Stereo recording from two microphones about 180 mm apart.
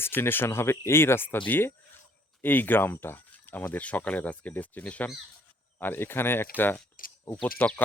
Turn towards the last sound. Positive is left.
turn(degrees=10)  # may be behind; listen again after turning